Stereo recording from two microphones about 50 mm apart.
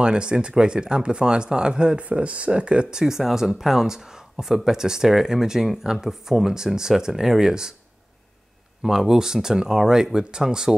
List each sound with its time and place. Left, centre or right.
0.0 s speech: centre
8.8 s speech: centre